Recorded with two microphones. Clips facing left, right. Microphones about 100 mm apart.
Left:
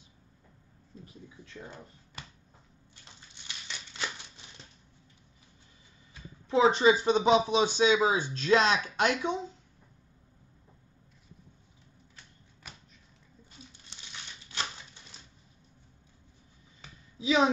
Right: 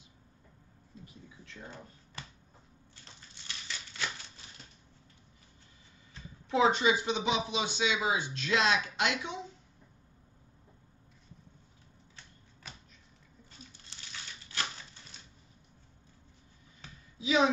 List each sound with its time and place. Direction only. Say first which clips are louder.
3.4 s scissors: even; 20° left (ahead or behind)
6.5 s speech: left 4 dB; 30° left (ahead or behind)
17.2 s a sound: left 2 dB; 30° left (ahead or behind)